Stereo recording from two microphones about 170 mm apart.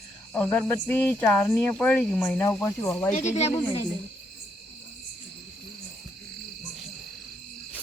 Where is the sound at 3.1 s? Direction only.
40° left (ahead or behind).